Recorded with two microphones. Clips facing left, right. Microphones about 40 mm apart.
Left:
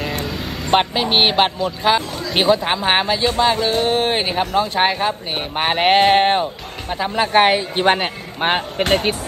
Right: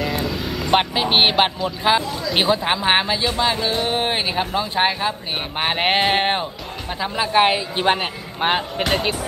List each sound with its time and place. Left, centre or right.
0.7 s speech: centre
3.5 s a sound: centre
4.1 s speech: centre
7.2 s speech: left
8.4 s speech: centre
8.8 s speech: left